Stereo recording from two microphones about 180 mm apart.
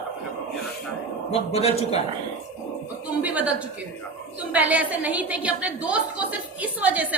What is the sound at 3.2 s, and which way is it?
A woman's voice, 10° right (ahead or behind).